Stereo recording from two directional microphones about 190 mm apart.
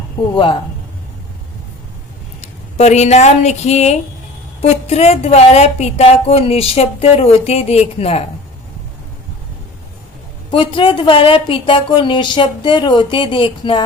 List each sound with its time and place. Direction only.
2.4 s speech: 35° left (ahead or behind)
10.5 s speech: 25° left (ahead or behind)